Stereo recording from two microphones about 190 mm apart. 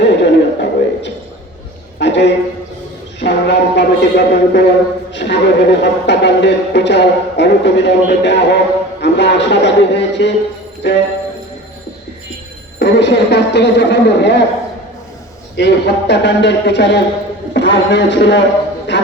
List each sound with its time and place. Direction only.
0.0 s a sound: 65° left (ahead or behind)
3.2 s speech: 65° left (ahead or behind)
12.8 s speech: 65° left (ahead or behind)
15.5 s speech: 65° left (ahead or behind)